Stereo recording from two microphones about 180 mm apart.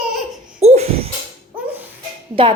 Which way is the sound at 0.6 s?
35° right (ahead or behind).